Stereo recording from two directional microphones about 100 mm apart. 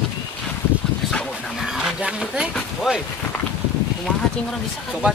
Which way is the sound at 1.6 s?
5° right (ahead or behind).